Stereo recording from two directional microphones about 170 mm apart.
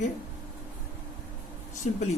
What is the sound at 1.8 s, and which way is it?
Speech, 45° left (ahead or behind).